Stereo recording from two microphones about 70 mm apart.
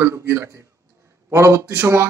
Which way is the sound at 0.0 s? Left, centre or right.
Right.